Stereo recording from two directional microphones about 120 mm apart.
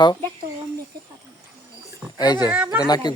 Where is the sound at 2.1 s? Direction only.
35° left (ahead or behind).